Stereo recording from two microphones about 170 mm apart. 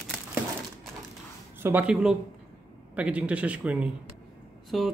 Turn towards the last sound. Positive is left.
turn(degrees=0)  # may be behind; listen again after turning